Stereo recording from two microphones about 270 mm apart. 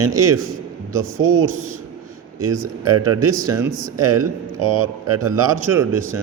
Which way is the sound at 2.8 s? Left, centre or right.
Right.